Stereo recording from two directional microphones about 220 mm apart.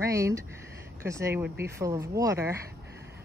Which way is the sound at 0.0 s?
15° right (ahead or behind).